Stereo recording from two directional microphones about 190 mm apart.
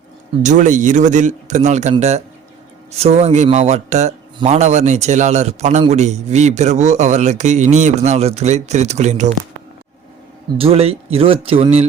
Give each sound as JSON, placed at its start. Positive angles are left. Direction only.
{"t": 0.4, "sound": "speech", "side_deg": -40}
{"t": 10.6, "sound": "speech", "side_deg": -30}